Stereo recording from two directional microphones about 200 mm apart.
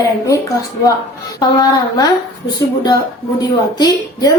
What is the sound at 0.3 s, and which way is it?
A woman's voice, 15° left (ahead or behind).